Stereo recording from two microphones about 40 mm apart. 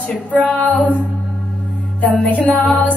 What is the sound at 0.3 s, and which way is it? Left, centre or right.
Music, left.